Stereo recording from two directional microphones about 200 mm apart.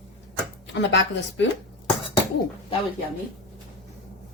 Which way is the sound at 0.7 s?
60° left (ahead or behind).